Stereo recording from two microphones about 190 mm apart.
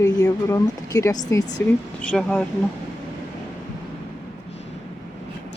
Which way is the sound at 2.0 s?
5° left (ahead or behind).